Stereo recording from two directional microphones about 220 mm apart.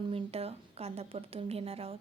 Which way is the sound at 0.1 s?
25° right (ahead or behind).